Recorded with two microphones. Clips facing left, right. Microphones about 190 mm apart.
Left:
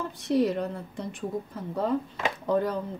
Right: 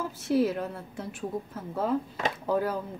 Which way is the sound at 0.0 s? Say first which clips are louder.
Left 1 dB; 5° right (ahead or behind).